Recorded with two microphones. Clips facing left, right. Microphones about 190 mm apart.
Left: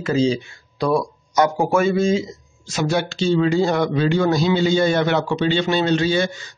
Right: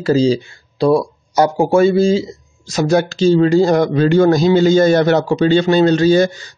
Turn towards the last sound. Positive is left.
turn(degrees=-35)  # may be behind; listen again after turning